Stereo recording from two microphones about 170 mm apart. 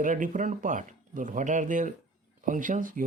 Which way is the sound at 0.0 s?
50° right (ahead or behind).